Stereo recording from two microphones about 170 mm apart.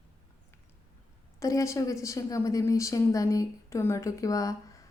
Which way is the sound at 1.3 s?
20° left (ahead or behind).